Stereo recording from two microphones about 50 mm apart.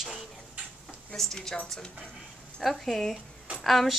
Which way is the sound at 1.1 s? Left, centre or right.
Centre.